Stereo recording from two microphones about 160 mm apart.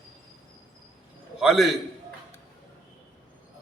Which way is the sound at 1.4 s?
Centre (ahead or behind).